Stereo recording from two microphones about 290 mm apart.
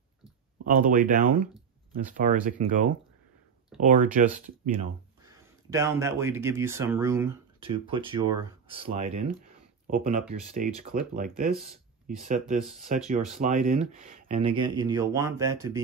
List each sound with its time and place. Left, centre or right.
0.7 s speech: right
5.2 s speech: centre